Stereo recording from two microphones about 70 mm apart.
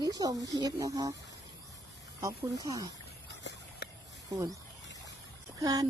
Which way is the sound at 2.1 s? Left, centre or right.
Right.